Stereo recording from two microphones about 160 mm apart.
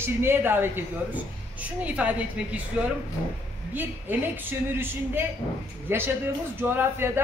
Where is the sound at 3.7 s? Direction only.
10° right (ahead or behind).